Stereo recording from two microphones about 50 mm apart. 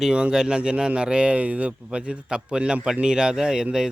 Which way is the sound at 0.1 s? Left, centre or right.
Centre.